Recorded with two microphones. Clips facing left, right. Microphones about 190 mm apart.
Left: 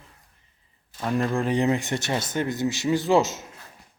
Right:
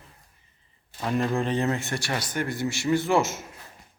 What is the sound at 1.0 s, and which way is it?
Speech, centre (ahead or behind).